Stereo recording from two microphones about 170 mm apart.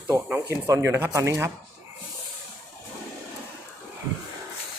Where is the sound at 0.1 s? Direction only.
15° right (ahead or behind).